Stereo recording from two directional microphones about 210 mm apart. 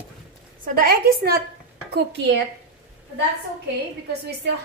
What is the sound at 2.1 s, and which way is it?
Speech, 55° right (ahead or behind).